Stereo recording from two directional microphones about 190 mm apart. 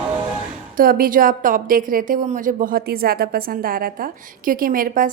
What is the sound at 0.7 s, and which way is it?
A woman's voice, 50° right (ahead or behind).